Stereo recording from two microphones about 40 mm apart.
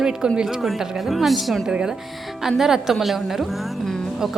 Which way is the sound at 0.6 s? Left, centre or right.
Centre.